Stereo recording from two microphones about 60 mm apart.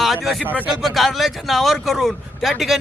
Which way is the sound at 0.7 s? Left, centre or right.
Centre.